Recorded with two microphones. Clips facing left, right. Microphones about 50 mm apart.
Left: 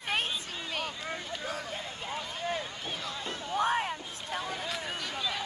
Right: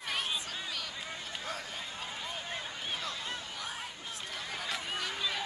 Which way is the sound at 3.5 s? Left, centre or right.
Left.